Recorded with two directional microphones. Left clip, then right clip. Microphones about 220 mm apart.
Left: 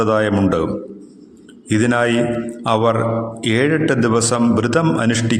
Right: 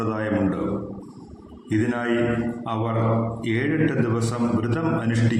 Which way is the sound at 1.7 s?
45° left (ahead or behind).